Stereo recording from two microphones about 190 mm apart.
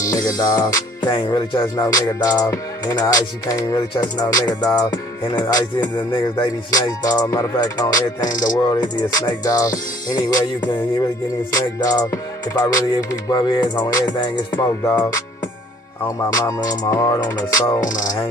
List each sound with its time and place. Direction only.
0.0 s music: 20° left (ahead or behind)
16.3 s music: 20° left (ahead or behind)